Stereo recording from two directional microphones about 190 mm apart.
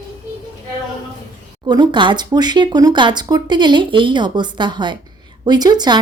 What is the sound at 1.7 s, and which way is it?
Speech, 25° right (ahead or behind).